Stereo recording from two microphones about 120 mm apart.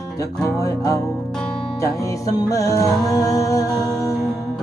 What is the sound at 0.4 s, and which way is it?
Music, 25° left (ahead or behind).